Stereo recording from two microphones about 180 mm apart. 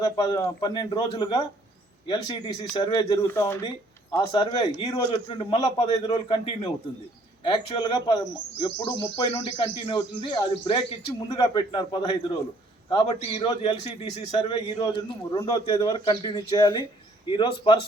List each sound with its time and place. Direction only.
0.0 s a man's voice: 20° left (ahead or behind)
4.3 s a man's voice: 25° left (ahead or behind)